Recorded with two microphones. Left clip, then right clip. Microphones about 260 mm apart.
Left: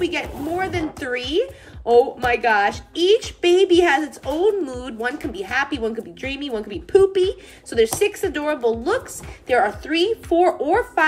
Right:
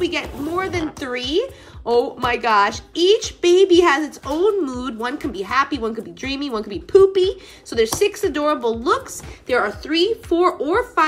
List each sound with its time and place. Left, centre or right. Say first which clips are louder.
0.0 s speech: right 1 dB; centre